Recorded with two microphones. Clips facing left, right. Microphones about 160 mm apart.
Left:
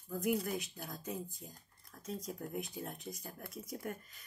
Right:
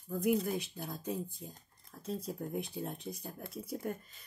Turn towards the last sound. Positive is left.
turn(degrees=-30)  # may be behind; listen again after turning